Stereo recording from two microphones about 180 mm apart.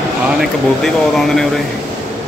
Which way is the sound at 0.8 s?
Centre (ahead or behind).